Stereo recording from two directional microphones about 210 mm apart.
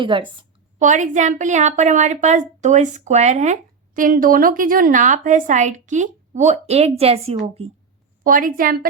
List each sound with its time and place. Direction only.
0.0 s a woman's voice: 25° right (ahead or behind)
0.8 s a woman's voice: 35° right (ahead or behind)
8.2 s a woman's voice: 40° right (ahead or behind)